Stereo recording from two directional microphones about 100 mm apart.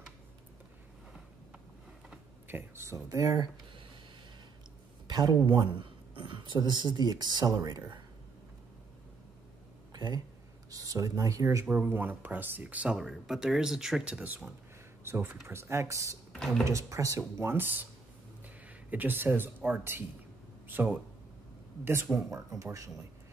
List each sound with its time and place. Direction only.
2.4 s speech: 20° right (ahead or behind)
5.0 s a sound: 45° right (ahead or behind)
5.5 s speech: 55° right (ahead or behind)
9.9 s speech: 45° right (ahead or behind)
11.6 s speech: 10° right (ahead or behind); by 16.2 s 30° right (ahead or behind)
16.3 s speech: 5° left (ahead or behind)
16.6 s speech: 30° right (ahead or behind)
22.1 s speech: 30° right (ahead or behind)